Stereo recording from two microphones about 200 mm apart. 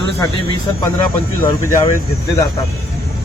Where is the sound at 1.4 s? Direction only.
15° left (ahead or behind).